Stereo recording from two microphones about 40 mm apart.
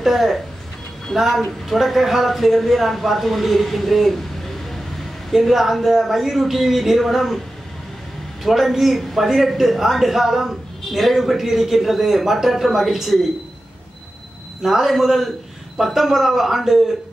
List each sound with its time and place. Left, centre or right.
0.0 s a man's voice: centre
8.5 s a man's voice: centre
14.6 s a man's voice: centre